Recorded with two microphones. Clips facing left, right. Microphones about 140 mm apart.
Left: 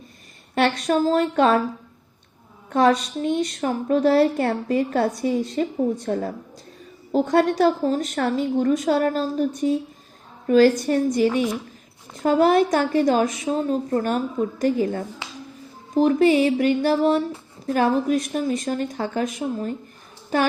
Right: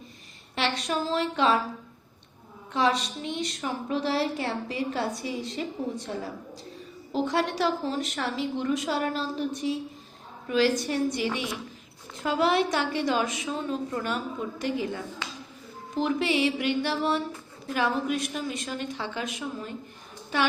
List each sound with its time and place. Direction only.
0.5 s a woman's voice: 50° left (ahead or behind)
2.6 s a woman's voice: 50° left (ahead or behind)